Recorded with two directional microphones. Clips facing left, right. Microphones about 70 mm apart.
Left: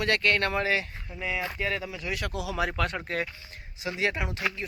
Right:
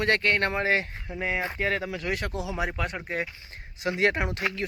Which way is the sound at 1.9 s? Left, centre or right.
Right.